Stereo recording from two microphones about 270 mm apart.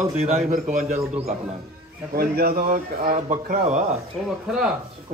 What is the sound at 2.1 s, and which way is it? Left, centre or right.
Speech, right.